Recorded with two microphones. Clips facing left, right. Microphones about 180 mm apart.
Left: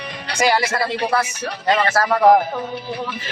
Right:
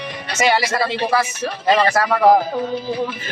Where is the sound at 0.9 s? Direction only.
25° right (ahead or behind).